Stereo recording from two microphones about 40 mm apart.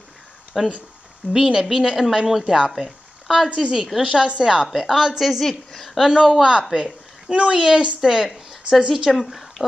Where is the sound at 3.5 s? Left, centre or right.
Centre.